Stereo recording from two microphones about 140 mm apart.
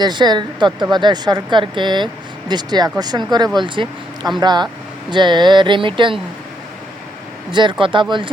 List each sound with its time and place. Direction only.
0.0 s speech: 30° right (ahead or behind)
7.5 s speech: 35° right (ahead or behind)